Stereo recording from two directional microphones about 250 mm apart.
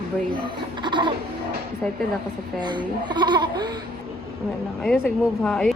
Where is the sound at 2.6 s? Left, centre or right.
Centre.